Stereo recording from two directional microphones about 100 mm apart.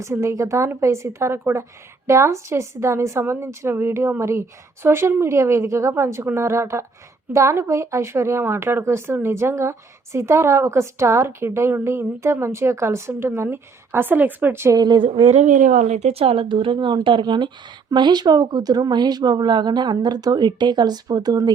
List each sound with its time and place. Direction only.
0.0 s speech: 30° right (ahead or behind)
14.8 s speech: 50° right (ahead or behind)
15.1 s speech: 90° right; by 21.5 s 40° right (ahead or behind)